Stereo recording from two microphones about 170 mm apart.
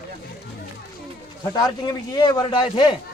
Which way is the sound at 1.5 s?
20° left (ahead or behind).